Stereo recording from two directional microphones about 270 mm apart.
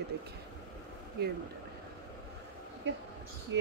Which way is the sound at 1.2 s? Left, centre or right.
Right.